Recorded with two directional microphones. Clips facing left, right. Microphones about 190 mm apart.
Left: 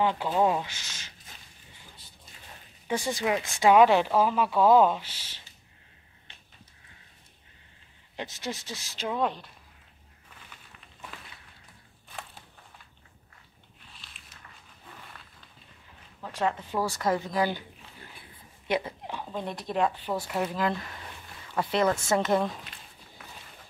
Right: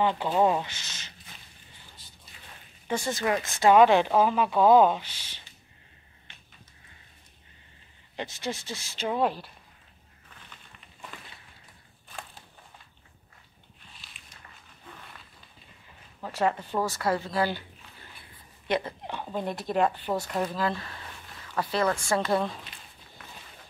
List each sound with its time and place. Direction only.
0.0 s speech: 5° left (ahead or behind)
2.9 s speech: 15° left (ahead or behind)
8.2 s speech: 5° left (ahead or behind)
13.9 s walk: centre (ahead or behind)
16.2 s speech: 5° right (ahead or behind)
16.8 s speech: 15° left (ahead or behind)
18.7 s a woman's voice: 5° left (ahead or behind)